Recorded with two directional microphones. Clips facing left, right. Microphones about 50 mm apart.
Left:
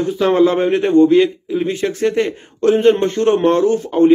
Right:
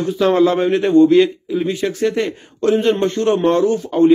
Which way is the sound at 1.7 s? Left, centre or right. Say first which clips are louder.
Left 1 dB; left.